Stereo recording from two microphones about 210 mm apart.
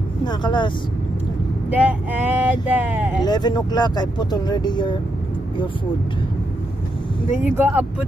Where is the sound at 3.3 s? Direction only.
20° left (ahead or behind).